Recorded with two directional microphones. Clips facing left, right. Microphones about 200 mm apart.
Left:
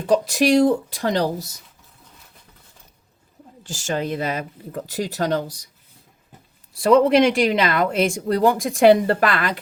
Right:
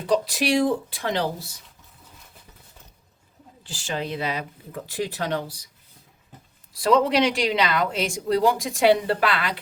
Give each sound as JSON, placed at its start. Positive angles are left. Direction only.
{"t": 0.0, "sound": "a woman's voice", "side_deg": 45}
{"t": 3.6, "sound": "a woman's voice", "side_deg": 45}
{"t": 6.8, "sound": "a woman's voice", "side_deg": 50}